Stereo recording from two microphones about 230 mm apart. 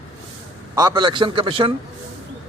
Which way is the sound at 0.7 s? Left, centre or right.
Centre.